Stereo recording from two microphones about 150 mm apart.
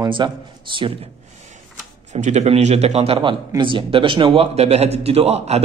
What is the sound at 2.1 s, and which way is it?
A man's voice, 50° right (ahead or behind).